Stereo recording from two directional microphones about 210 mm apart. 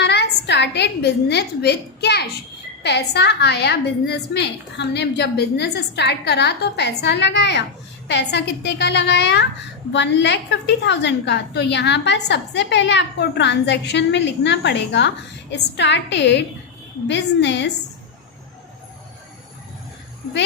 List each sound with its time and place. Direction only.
0.0 s a woman's voice: 55° left (ahead or behind)